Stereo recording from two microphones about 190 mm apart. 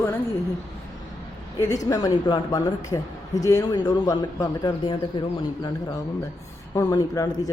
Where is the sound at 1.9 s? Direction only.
20° left (ahead or behind).